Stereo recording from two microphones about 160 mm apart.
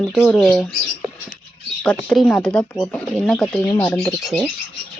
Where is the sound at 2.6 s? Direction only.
25° left (ahead or behind).